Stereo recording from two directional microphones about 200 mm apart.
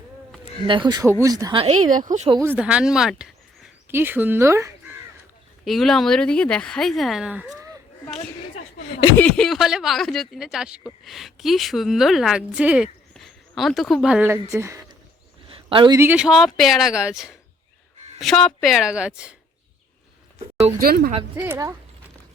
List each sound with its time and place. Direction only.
0.7 s speech: 20° right (ahead or behind)
1.6 s speech: 35° right (ahead or behind)
2.3 s speech: 10° right (ahead or behind)
5.6 s speech: centre (ahead or behind)
9.1 s speech: 5° left (ahead or behind); by 14.8 s 15° right (ahead or behind)
15.4 s a sound: 25° right (ahead or behind)
16.0 s speech: 5° right (ahead or behind)
20.7 s speech: 50° right (ahead or behind)
21.3 s speech: 15° right (ahead or behind)